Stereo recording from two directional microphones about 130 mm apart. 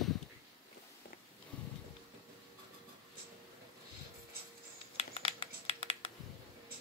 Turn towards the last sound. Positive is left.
turn(degrees=45)  # may be behind; listen again after turning